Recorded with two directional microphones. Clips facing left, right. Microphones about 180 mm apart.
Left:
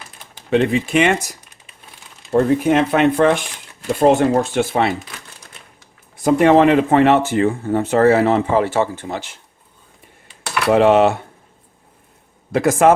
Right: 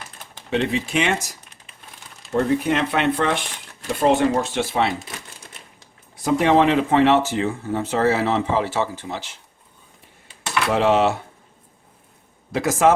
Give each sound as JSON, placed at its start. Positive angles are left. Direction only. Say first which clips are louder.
{"t": 0.5, "sound": "speech", "louder": "left 6 dB", "side_deg": 55}
{"t": 2.3, "sound": "speech", "louder": "left 5 dB", "side_deg": 50}
{"t": 6.2, "sound": "speech", "louder": "left 5 dB", "side_deg": 50}
{"t": 10.7, "sound": "speech", "louder": "left 6 dB", "side_deg": 55}
{"t": 12.5, "sound": "speech", "louder": "left 4 dB", "side_deg": 55}